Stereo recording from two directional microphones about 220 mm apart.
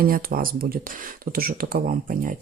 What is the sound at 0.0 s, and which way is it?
Speech, 40° right (ahead or behind).